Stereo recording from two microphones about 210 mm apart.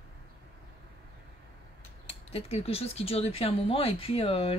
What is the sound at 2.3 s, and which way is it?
Speech, 30° left (ahead or behind).